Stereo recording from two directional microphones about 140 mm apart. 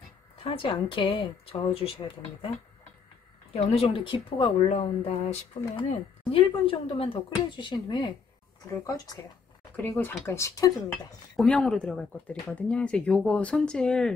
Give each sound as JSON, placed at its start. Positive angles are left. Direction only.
{"t": 0.4, "sound": "a woman's voice", "side_deg": 45}
{"t": 3.5, "sound": "a woman's voice", "side_deg": 45}
{"t": 9.8, "sound": "speech", "side_deg": 15}
{"t": 11.3, "sound": "speech", "side_deg": 5}